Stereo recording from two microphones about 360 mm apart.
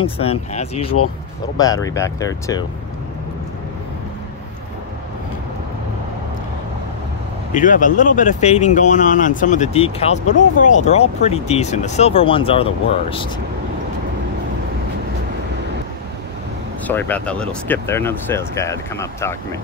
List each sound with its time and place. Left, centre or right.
0.0 s speech: centre
7.5 s speech: left
16.8 s speech: centre